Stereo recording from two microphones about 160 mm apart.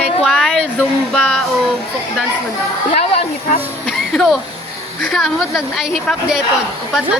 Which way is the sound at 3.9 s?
Centre (ahead or behind).